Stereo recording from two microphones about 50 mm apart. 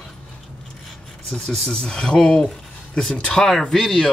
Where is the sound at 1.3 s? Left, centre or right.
Centre.